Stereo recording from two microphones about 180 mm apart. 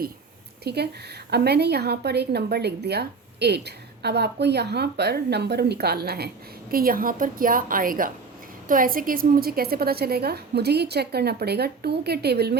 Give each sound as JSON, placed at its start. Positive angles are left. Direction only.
{"t": 0.6, "sound": "a woman's voice", "side_deg": -65}